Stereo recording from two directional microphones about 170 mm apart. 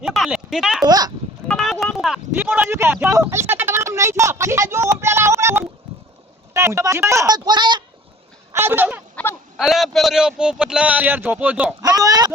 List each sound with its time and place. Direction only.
0.0 s speech: centre (ahead or behind)
0.9 s speech: 25° right (ahead or behind)
1.5 s a sound: 5° left (ahead or behind)
2.3 s speech: 10° right (ahead or behind)
3.1 s a sound: 15° right (ahead or behind)
6.5 s speech: 15° right (ahead or behind)
8.5 s speech: 15° right (ahead or behind)
9.2 s whimper: 5° left (ahead or behind)
9.6 s speech: centre (ahead or behind)
11.8 s speech: 20° right (ahead or behind)